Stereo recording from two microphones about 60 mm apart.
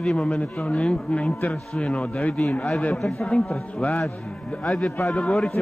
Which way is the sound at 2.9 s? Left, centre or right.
Centre.